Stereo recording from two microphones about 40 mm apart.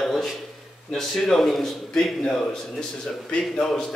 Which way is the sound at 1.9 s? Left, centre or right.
Centre.